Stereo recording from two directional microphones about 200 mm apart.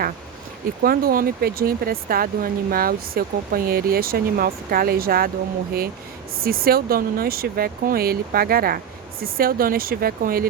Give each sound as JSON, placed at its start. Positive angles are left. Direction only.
{"t": 0.8, "sound": "speech", "side_deg": -50}
{"t": 6.4, "sound": "speech", "side_deg": -50}